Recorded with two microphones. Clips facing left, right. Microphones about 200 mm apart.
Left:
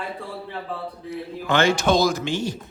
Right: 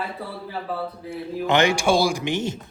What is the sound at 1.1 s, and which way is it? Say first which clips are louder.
Speech: right 2 dB; 20° right (ahead or behind).